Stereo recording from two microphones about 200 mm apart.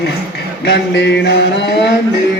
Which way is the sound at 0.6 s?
60° left (ahead or behind).